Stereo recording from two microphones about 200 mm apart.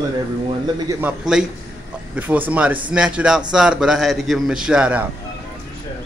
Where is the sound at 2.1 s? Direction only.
10° right (ahead or behind).